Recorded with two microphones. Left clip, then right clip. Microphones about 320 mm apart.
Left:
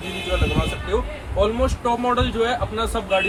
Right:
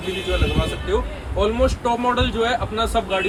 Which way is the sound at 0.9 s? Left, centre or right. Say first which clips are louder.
Left 2 dB; centre.